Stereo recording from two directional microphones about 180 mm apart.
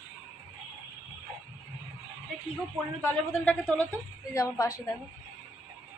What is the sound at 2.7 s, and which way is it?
A man's voice, 10° left (ahead or behind).